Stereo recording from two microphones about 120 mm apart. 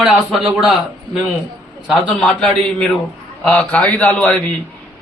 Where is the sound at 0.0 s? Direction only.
5° right (ahead or behind).